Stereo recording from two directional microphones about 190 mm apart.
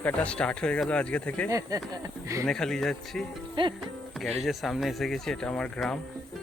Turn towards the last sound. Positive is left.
turn(degrees=5)  # may be behind; listen again after turning